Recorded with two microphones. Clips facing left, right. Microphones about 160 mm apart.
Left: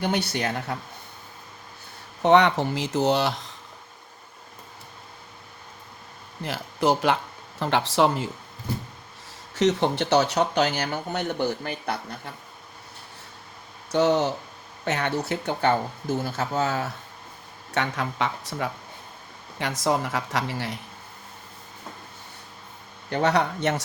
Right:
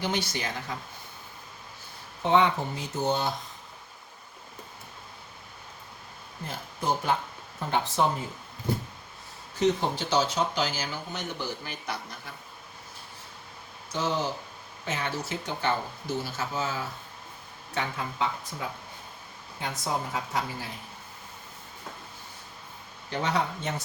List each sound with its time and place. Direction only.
0.0 s speech: 60° left (ahead or behind)
2.2 s speech: 80° left
6.4 s speech: 75° left (ahead or behind)
9.6 s speech: 75° left (ahead or behind); by 12.3 s 55° left (ahead or behind)
13.9 s speech: 70° left (ahead or behind)
19.5 s speech: 90° left
23.0 s speech: 65° left (ahead or behind)